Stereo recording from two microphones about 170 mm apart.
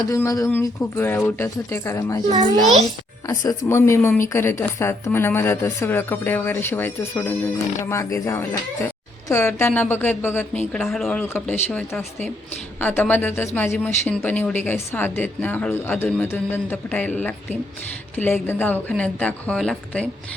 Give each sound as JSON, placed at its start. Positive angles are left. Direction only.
{"t": 0.1, "sound": "a woman's voice", "side_deg": 20}
{"t": 3.2, "sound": "a woman's voice", "side_deg": 20}